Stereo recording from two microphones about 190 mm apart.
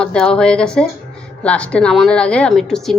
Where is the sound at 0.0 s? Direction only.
5° left (ahead or behind).